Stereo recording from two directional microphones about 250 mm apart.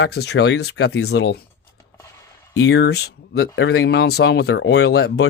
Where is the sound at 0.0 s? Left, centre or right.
Left.